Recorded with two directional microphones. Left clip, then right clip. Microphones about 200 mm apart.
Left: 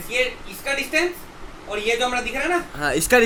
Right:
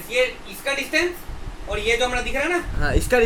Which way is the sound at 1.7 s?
Centre (ahead or behind).